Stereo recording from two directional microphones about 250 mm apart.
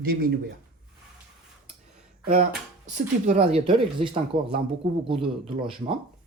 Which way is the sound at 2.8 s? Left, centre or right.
Right.